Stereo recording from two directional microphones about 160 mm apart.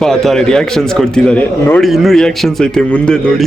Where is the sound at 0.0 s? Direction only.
Centre (ahead or behind).